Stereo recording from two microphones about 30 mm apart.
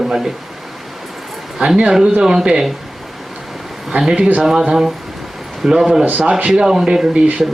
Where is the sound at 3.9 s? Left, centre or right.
Right.